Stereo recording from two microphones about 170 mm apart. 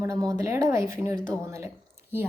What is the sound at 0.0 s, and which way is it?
A woman's voice, 20° right (ahead or behind).